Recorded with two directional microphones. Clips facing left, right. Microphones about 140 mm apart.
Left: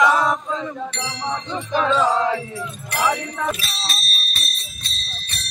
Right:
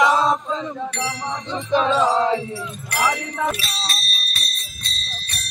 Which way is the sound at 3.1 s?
Centre (ahead or behind).